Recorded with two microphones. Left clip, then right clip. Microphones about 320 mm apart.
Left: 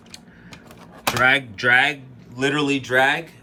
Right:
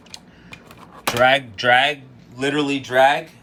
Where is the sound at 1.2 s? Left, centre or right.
Centre.